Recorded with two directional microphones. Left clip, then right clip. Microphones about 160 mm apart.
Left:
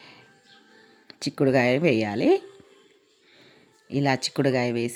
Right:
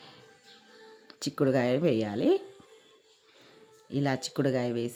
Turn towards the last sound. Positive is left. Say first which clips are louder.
# left 5 dB
turn(degrees=20)  # may be behind; listen again after turning